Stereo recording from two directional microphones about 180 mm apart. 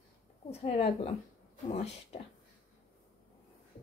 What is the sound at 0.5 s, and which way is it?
A woman's voice, 35° left (ahead or behind).